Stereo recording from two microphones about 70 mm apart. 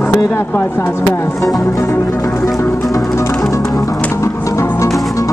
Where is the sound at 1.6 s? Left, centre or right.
Left.